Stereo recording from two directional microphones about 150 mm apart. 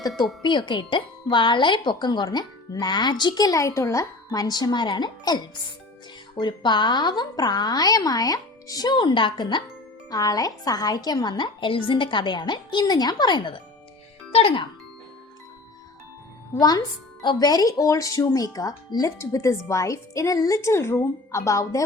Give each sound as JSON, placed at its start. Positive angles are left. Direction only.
{"t": 0.4, "sound": "speech", "side_deg": 30}
{"t": 16.6, "sound": "speech", "side_deg": 25}